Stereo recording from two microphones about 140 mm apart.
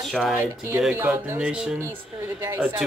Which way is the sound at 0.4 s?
15° right (ahead or behind).